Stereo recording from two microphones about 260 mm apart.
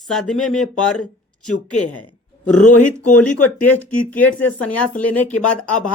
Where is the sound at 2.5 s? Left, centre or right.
Left.